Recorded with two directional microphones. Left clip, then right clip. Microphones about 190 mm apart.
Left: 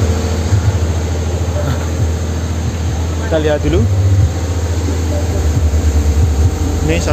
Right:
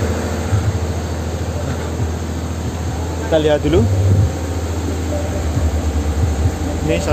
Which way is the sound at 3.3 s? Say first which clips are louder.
Right 1 dB; 15° right (ahead or behind).